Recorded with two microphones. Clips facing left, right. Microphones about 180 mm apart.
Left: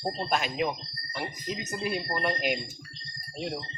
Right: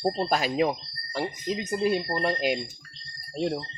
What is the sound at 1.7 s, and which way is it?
Speech, 30° right (ahead or behind).